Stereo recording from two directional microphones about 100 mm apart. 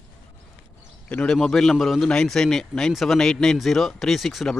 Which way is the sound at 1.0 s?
10° left (ahead or behind).